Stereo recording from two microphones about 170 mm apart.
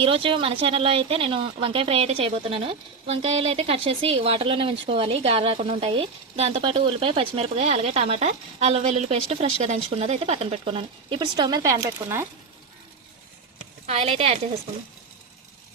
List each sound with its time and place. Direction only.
0.0 s speech: 30° right (ahead or behind); by 12.2 s 15° right (ahead or behind)
13.8 s speech: 40° right (ahead or behind)